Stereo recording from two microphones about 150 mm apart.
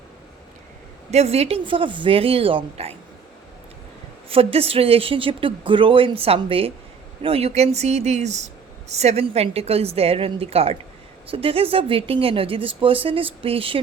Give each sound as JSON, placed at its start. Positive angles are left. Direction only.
{"t": 1.1, "sound": "speech", "side_deg": -45}
{"t": 4.3, "sound": "speech", "side_deg": -40}